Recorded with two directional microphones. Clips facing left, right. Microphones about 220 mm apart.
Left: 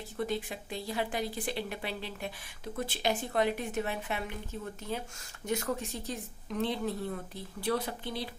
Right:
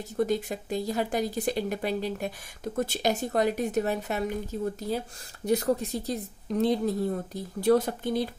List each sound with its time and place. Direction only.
0.2 s speech: 45° right (ahead or behind)